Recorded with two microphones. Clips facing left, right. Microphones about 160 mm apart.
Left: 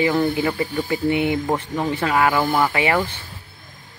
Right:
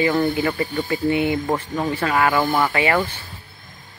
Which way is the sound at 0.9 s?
20° left (ahead or behind).